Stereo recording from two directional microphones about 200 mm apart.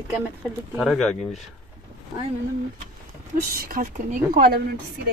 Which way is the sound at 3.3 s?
45° right (ahead or behind).